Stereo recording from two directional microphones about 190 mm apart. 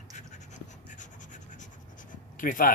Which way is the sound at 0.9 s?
40° left (ahead or behind).